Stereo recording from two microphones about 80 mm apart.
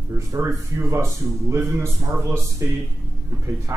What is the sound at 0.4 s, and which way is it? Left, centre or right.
A man's voice, right.